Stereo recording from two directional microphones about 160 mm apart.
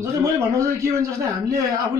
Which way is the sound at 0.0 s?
20° right (ahead or behind).